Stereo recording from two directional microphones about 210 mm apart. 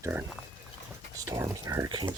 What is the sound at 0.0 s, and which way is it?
Speech, 10° right (ahead or behind).